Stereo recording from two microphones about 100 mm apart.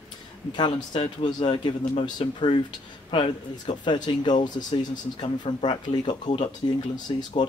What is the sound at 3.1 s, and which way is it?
Speech, 65° left (ahead or behind).